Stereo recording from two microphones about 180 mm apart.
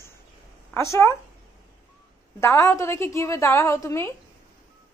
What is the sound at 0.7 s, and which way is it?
Speech, 15° left (ahead or behind).